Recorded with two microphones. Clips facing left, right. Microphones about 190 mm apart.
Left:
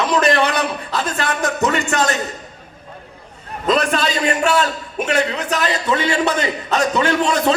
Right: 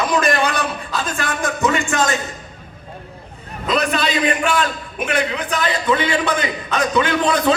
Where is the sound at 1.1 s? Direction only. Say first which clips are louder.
Left 2 dB; 40° left (ahead or behind).